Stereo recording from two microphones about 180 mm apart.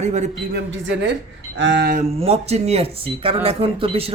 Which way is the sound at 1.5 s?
85° right.